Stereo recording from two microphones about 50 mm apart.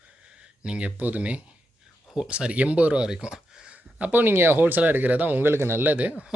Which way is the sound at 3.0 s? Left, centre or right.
Centre.